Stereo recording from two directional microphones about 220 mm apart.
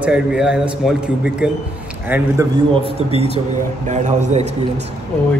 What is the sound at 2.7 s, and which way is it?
A man's voice, 25° right (ahead or behind).